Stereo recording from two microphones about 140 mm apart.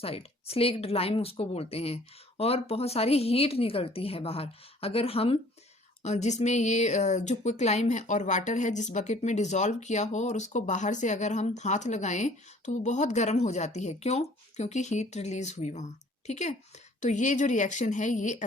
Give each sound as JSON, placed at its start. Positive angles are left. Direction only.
{"t": 0.0, "sound": "a woman's voice", "side_deg": 45}
{"t": 6.0, "sound": "a woman's voice", "side_deg": 55}